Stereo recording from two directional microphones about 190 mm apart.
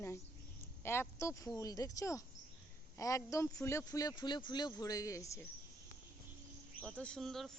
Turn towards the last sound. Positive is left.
turn(degrees=0)  # may be behind; listen again after turning